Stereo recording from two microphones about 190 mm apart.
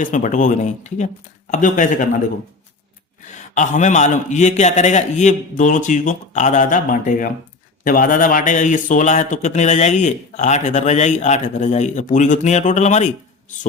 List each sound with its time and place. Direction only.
0.0 s speech: 40° left (ahead or behind)
3.5 s speech: 40° left (ahead or behind)